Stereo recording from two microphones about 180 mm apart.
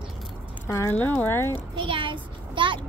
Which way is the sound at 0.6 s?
15° left (ahead or behind).